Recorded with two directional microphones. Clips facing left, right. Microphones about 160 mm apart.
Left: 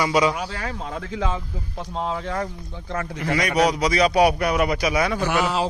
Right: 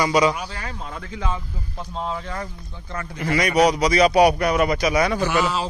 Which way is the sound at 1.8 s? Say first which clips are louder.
Left 2 dB; 70° left (ahead or behind).